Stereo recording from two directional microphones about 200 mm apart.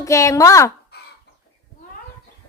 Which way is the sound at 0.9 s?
55° left (ahead or behind).